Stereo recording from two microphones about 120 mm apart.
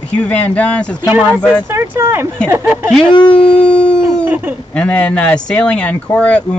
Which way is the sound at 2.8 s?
5° left (ahead or behind).